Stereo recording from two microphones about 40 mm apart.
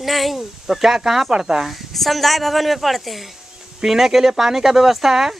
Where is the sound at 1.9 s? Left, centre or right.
Centre.